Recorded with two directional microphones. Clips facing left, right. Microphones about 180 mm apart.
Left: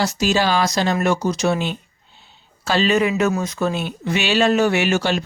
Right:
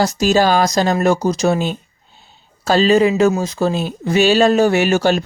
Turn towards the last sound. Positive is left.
turn(degrees=-40)  # may be behind; listen again after turning